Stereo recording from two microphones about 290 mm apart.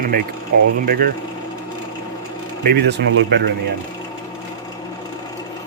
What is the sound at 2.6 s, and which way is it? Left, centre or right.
Speech, right.